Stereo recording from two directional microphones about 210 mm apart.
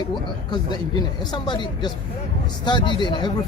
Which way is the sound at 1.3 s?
20° left (ahead or behind).